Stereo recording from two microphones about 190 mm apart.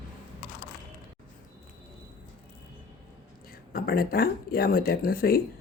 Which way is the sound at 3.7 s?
50° left (ahead or behind).